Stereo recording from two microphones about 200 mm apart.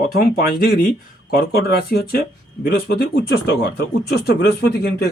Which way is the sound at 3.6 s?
55° left (ahead or behind).